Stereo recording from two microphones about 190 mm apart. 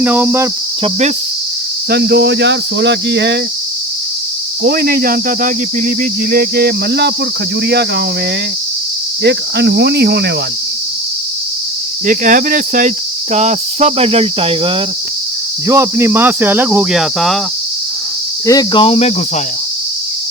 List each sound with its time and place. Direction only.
0.0 s speech: 10° right (ahead or behind)
1.9 s speech: 60° right (ahead or behind)
4.6 s cricket: 50° right (ahead or behind)
7.7 s speech: 60° right (ahead or behind)
9.2 s speech: 60° right (ahead or behind)
12.0 s cricket: 45° right (ahead or behind)
15.6 s speech: 15° right (ahead or behind)
18.4 s cricket: 20° left (ahead or behind)